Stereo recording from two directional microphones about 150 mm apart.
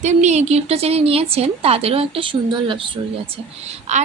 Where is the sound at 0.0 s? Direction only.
50° right (ahead or behind); by 3.0 s 35° right (ahead or behind).